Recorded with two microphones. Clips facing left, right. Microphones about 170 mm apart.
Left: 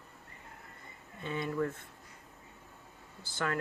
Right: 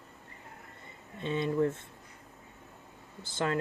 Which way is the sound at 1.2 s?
25° right (ahead or behind).